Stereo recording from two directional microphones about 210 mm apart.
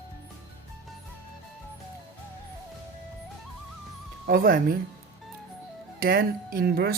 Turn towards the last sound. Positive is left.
turn(degrees=-45)  # may be behind; listen again after turning